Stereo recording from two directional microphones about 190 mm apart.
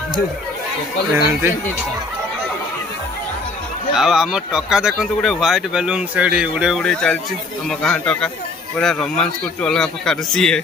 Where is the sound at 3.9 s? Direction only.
5° right (ahead or behind).